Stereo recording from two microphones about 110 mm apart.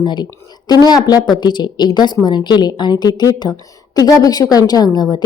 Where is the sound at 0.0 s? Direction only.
45° left (ahead or behind).